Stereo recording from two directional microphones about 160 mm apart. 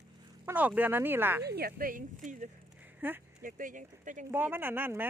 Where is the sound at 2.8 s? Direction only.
10° right (ahead or behind).